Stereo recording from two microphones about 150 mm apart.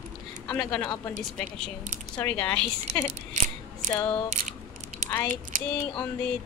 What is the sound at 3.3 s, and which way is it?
Scissors, 60° right (ahead or behind).